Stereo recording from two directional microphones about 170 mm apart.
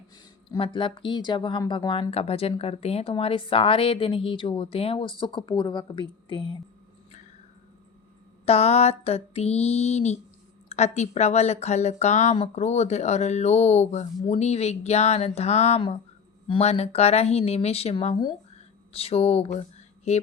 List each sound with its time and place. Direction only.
0.5 s speech: 30° left (ahead or behind)
8.4 s speech: 40° left (ahead or behind)